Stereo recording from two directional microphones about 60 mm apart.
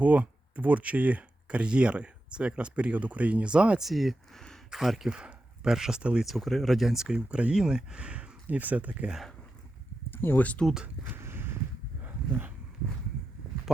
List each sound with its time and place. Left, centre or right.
0.0 s speech: right
3.8 s speech: centre
6.0 s speech: centre
6.2 s speech: centre; by 9.1 s right
10.1 s a sound: left
10.4 s speech: left
11.0 s a sound: right